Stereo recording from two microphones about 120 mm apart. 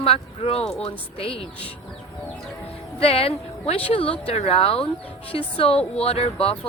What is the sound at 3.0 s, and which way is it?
Speech, 55° left (ahead or behind).